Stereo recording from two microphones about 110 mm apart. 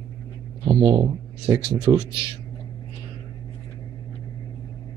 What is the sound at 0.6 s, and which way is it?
Speech, 45° right (ahead or behind).